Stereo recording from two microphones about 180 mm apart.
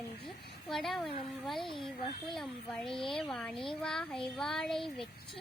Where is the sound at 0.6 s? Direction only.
Centre (ahead or behind).